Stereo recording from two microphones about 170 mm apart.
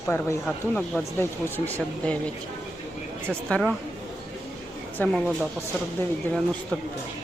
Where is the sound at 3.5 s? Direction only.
Centre (ahead or behind).